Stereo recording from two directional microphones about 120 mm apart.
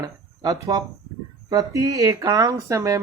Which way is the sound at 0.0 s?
30° right (ahead or behind).